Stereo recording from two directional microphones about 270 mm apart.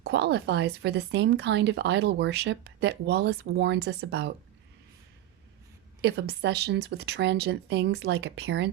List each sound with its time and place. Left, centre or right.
0.0 s speech: right
6.0 s speech: right